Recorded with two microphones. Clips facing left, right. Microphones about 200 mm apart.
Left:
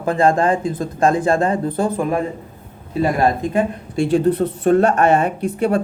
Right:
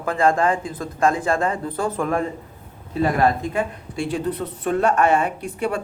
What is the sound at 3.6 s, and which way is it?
Speech, 25° left (ahead or behind).